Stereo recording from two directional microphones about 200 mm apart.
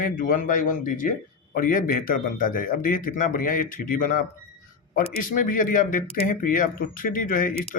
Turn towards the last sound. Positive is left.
turn(degrees=40)  # may be behind; listen again after turning